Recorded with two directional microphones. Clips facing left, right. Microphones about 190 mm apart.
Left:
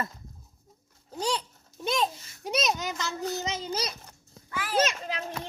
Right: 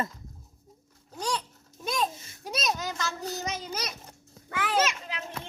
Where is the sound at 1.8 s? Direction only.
25° left (ahead or behind).